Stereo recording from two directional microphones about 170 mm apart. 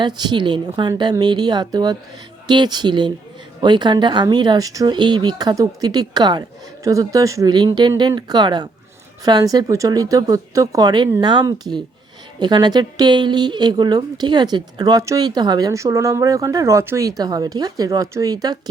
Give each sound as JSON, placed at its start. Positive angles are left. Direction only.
{"t": 0.2, "sound": "a woman's voice", "side_deg": -25}